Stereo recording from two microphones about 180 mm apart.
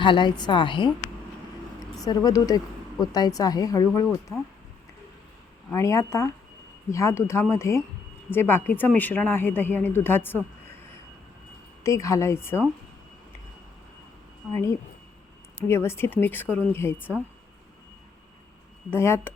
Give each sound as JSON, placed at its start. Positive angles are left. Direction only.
{"t": 0.0, "sound": "speech", "side_deg": 25}
{"t": 2.0, "sound": "speech", "side_deg": 20}
{"t": 5.7, "sound": "speech", "side_deg": 15}
{"t": 11.8, "sound": "speech", "side_deg": 15}
{"t": 14.5, "sound": "speech", "side_deg": 15}
{"t": 18.9, "sound": "speech", "side_deg": 15}